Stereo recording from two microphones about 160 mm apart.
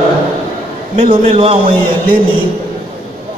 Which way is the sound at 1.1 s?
35° right (ahead or behind).